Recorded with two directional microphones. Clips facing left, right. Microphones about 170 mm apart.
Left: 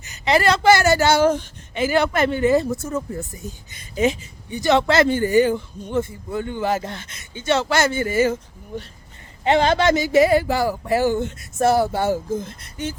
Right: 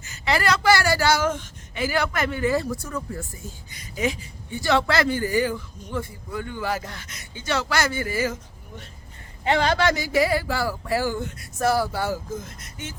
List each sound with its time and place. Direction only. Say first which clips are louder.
0.0 s speech: left 5 dB; 20° left (ahead or behind); by 13.0 s 35° left (ahead or behind)